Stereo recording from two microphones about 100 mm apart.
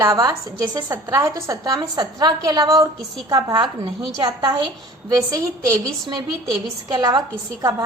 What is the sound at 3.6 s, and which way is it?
A woman's voice, 50° right (ahead or behind).